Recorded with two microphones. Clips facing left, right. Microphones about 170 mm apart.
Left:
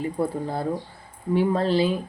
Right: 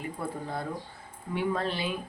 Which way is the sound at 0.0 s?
30° left (ahead or behind).